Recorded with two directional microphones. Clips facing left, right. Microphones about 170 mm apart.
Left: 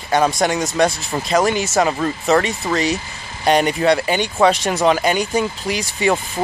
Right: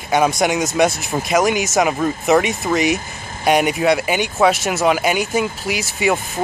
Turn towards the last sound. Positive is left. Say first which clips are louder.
# even
turn(degrees=-5)  # may be behind; listen again after turning